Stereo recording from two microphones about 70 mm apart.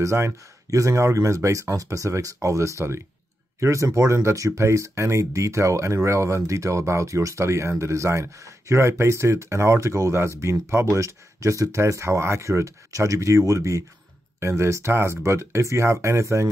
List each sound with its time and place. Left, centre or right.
0.0 s speech: right